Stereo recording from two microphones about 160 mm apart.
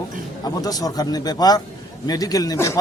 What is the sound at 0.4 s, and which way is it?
Speech, 25° left (ahead or behind).